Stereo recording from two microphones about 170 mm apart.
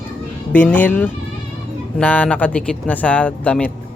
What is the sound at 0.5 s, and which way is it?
Speech, 10° left (ahead or behind).